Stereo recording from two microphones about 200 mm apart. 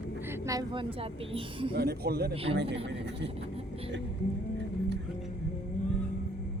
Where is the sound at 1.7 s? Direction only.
50° right (ahead or behind).